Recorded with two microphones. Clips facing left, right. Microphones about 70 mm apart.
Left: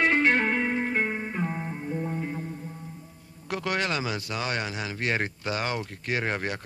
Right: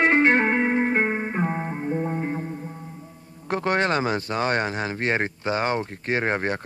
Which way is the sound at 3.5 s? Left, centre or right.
Right.